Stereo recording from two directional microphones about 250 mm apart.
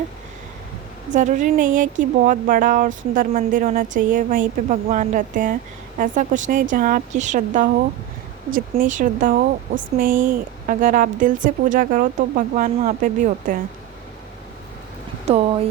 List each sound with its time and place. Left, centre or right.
1.1 s speech: right
8.7 s speech: right
15.3 s a sound: right